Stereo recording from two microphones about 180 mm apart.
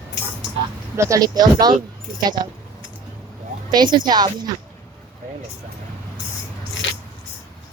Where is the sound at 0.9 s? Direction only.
15° right (ahead or behind).